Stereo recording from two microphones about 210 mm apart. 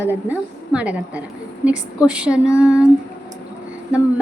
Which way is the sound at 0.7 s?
5° right (ahead or behind).